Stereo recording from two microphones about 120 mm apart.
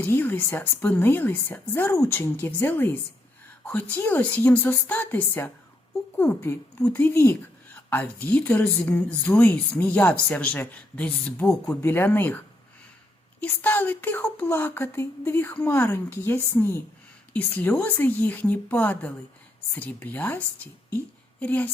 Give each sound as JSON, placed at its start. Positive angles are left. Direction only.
{"t": 0.0, "sound": "speech", "side_deg": 20}
{"t": 13.4, "sound": "speech", "side_deg": 15}